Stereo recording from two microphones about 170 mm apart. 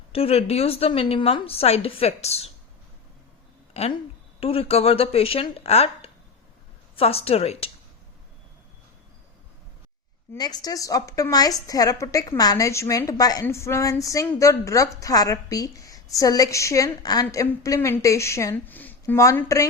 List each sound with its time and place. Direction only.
0.1 s a woman's voice: 35° left (ahead or behind)
3.8 s a woman's voice: 40° left (ahead or behind)
10.3 s a woman's voice: 25° left (ahead or behind)